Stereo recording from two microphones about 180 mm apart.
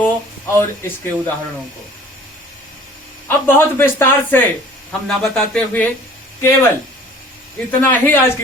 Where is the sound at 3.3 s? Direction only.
10° left (ahead or behind).